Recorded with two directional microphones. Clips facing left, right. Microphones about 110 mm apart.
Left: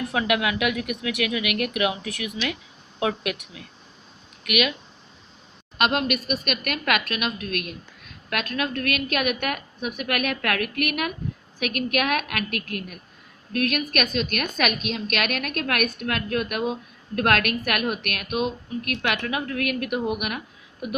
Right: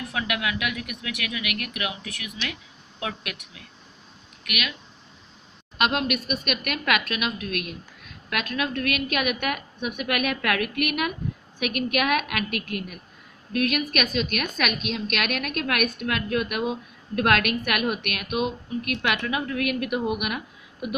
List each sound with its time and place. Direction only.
0.1 s speech: 20° left (ahead or behind)
5.8 s a woman's voice: centre (ahead or behind)